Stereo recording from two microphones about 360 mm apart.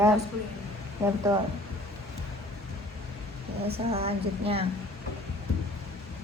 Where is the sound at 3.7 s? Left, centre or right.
Centre.